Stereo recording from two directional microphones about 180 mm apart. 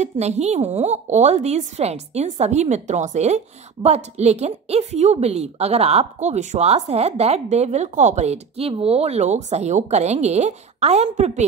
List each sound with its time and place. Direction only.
0.0 s a woman's voice: 40° right (ahead or behind)